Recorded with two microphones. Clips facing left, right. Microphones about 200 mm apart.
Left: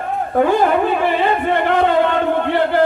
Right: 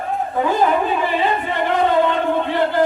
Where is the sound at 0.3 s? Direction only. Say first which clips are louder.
Left 4 dB; 60° left (ahead or behind).